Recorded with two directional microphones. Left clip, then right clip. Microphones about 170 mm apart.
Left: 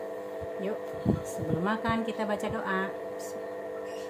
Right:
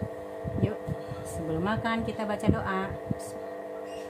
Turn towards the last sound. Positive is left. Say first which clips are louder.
# right 1 dB
turn(degrees=-15)  # may be behind; listen again after turning